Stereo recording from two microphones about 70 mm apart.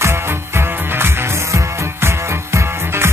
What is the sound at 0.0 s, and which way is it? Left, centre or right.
Music, right.